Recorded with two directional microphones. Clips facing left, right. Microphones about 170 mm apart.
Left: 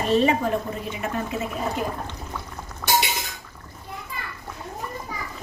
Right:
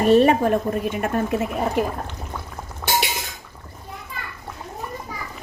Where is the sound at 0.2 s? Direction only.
55° right (ahead or behind).